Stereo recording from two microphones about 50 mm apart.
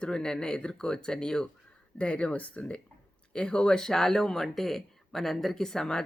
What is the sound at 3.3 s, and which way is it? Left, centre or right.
Speech, centre.